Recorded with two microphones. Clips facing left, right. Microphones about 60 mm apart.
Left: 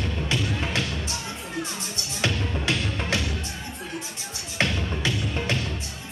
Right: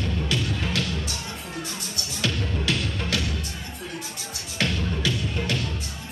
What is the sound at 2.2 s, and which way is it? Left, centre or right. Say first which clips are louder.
Music: left 1 dB; left.